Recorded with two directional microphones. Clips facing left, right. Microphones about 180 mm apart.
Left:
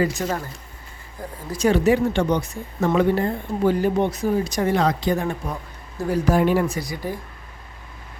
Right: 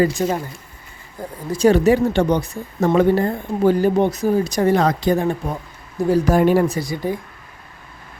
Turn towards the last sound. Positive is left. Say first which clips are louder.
# right 5 dB
turn(degrees=-25)  # may be behind; listen again after turning